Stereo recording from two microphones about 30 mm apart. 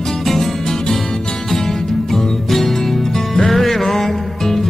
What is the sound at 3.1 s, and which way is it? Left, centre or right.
Music, centre.